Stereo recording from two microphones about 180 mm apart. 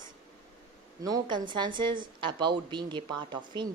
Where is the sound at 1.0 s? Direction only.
20° right (ahead or behind).